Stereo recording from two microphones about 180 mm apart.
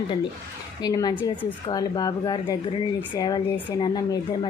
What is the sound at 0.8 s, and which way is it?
A woman's voice, 20° left (ahead or behind).